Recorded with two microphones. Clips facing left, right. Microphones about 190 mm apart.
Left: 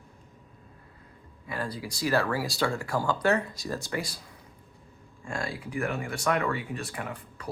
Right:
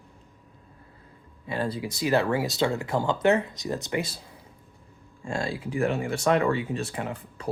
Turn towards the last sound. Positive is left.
turn(degrees=-25)  # may be behind; listen again after turning